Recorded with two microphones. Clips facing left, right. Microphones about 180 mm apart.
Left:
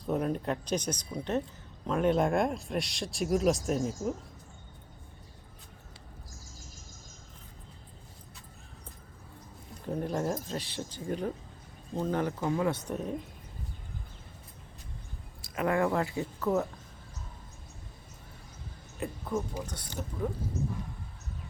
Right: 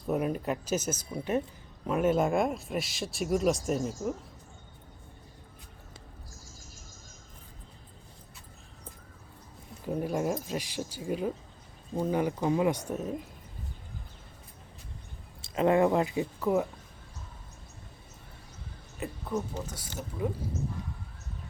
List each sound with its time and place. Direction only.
0.1 s speech: 5° right (ahead or behind)
9.8 s speech: 10° right (ahead or behind)
12.9 s speech: centre (ahead or behind)
15.4 s speech: 25° right (ahead or behind)
18.9 s speech: centre (ahead or behind)